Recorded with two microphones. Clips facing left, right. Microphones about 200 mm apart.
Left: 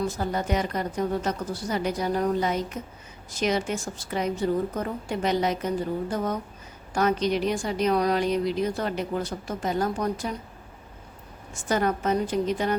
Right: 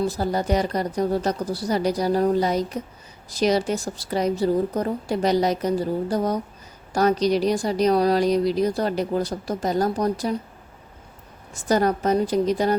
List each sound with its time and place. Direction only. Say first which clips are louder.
0.1 s a woman's voice: right 4 dB; 35° right (ahead or behind)
11.5 s a woman's voice: right 4 dB; 40° right (ahead or behind)